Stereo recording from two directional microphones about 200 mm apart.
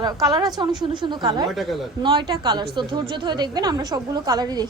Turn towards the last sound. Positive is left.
turn(degrees=-20)  # may be behind; listen again after turning